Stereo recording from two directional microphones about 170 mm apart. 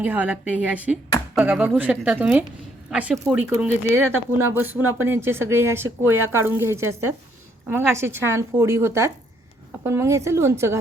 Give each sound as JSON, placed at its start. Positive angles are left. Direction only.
{"t": 0.0, "sound": "speech", "side_deg": -10}